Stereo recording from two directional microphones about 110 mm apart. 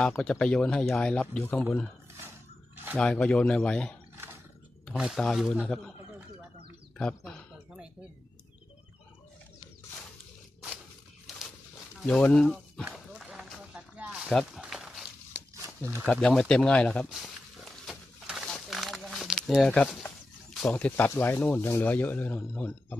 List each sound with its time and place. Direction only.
0.0 s speech: 5° left (ahead or behind)
3.0 s speech: 10° left (ahead or behind)
4.8 s speech: 5° right (ahead or behind)
7.0 s speech: 5° left (ahead or behind)
12.0 s speech: 10° left (ahead or behind)
12.9 s a sound: 5° right (ahead or behind)
15.6 s a sound: 25° right (ahead or behind)
16.2 s speech: 5° left (ahead or behind)
17.6 s a sound: centre (ahead or behind)
20.7 s speech: 15° left (ahead or behind)